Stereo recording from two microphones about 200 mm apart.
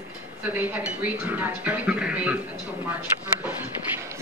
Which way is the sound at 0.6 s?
10° right (ahead or behind).